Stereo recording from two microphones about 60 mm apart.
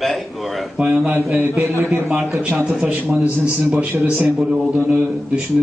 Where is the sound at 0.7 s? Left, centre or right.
Centre.